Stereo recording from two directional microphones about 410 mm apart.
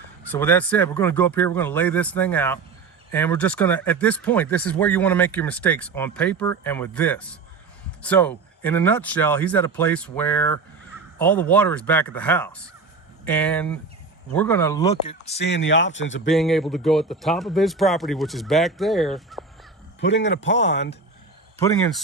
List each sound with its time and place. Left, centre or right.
0.3 s speech: centre; by 16.2 s left
16.3 s speech: centre
20.0 s speech: left
21.6 s speech: centre